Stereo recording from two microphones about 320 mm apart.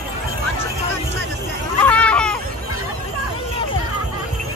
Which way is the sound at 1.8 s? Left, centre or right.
Centre.